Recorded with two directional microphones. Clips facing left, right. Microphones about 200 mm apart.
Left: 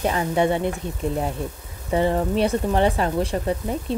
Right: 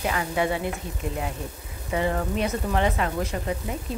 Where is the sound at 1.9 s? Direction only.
30° left (ahead or behind).